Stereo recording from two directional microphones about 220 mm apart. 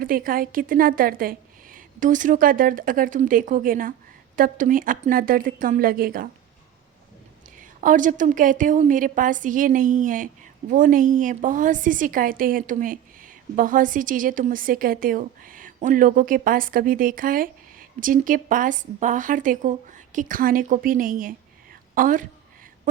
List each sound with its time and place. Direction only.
0.0 s a woman's voice: 40° right (ahead or behind)
7.6 s a woman's voice: 35° right (ahead or behind)